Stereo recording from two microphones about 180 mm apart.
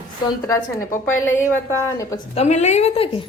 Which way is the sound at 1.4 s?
15° left (ahead or behind).